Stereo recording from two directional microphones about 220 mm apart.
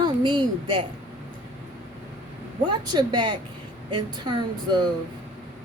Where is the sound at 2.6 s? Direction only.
20° right (ahead or behind).